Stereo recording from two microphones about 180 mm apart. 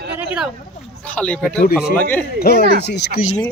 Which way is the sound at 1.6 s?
55° left (ahead or behind).